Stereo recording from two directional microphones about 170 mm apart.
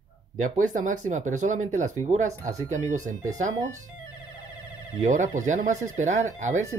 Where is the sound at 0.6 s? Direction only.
50° right (ahead or behind).